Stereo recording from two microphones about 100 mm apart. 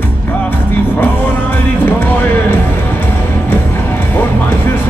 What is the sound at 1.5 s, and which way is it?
Speech, 20° left (ahead or behind).